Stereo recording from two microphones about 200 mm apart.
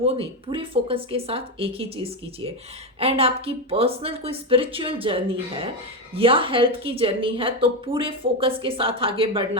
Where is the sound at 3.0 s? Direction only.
30° right (ahead or behind).